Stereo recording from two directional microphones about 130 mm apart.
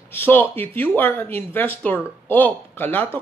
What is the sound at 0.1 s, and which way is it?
Speech, 15° left (ahead or behind).